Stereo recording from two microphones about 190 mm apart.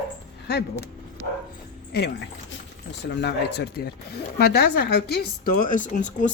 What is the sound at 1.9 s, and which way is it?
A woman's voice, 60° left (ahead or behind).